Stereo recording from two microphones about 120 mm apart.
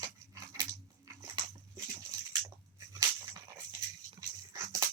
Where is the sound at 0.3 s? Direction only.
30° right (ahead or behind).